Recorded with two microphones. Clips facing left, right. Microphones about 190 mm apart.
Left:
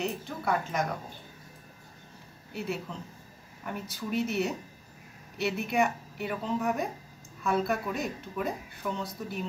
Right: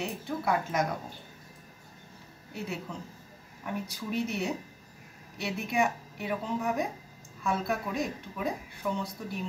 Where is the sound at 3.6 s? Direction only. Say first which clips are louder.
Right 1 dB; centre (ahead or behind).